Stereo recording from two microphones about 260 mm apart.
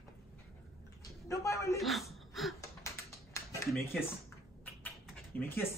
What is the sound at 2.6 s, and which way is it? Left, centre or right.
Typing, centre.